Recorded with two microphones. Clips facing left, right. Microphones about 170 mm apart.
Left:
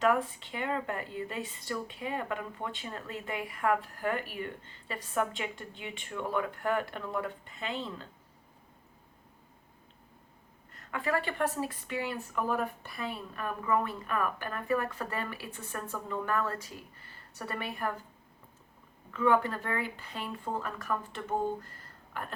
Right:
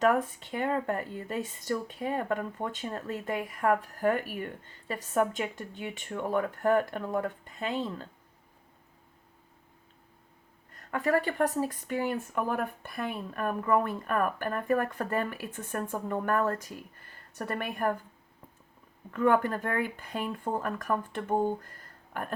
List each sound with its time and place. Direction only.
0.0 s speech: 45° right (ahead or behind)
10.8 s speech: 45° right (ahead or behind)
19.1 s speech: 50° right (ahead or behind)